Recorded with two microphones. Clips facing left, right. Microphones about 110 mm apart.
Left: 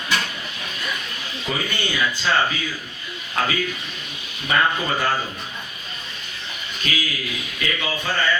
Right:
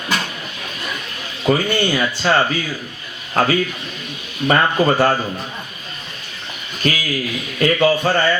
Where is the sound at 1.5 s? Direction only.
45° right (ahead or behind).